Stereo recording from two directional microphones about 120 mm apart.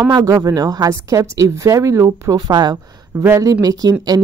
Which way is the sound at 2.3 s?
35° right (ahead or behind).